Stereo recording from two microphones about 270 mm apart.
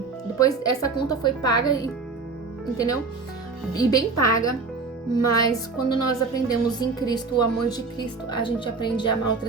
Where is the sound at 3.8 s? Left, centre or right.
Centre.